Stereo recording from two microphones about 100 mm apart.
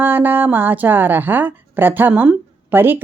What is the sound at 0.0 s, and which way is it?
A woman's voice, 20° right (ahead or behind).